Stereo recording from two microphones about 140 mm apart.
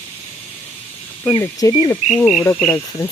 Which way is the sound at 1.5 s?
30° left (ahead or behind).